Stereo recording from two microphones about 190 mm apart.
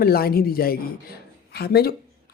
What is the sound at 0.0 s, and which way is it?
Speech, 50° left (ahead or behind).